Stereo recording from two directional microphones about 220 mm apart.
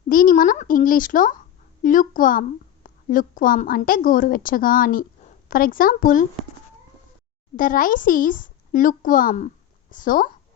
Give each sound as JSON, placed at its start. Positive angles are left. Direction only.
{"t": 0.1, "sound": "a child's voice", "side_deg": 40}
{"t": 7.5, "sound": "a child's voice", "side_deg": 40}